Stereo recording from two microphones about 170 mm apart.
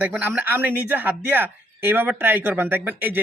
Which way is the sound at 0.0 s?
10° right (ahead or behind).